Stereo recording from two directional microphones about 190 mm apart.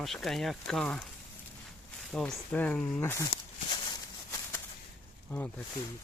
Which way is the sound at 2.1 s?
5° left (ahead or behind).